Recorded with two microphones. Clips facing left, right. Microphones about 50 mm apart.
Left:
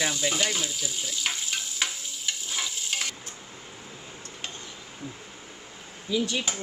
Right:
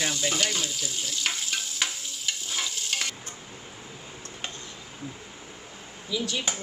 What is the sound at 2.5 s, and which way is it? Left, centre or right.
Stir, centre.